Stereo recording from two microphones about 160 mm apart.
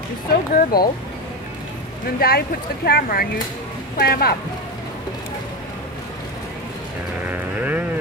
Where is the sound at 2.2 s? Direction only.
75° left (ahead or behind).